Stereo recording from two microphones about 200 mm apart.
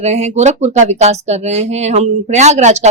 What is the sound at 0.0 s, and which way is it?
Speech, 35° right (ahead or behind).